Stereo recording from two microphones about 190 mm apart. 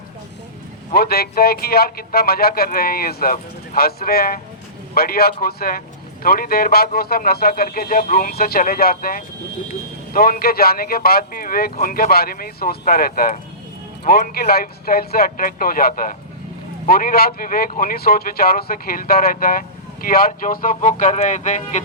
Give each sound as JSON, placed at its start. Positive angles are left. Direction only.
{"t": 0.9, "sound": "a man's voice", "side_deg": 55}